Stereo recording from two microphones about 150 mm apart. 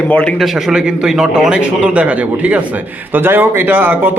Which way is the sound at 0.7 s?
5° right (ahead or behind).